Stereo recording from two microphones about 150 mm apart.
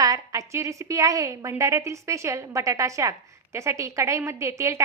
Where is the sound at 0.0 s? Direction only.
20° right (ahead or behind).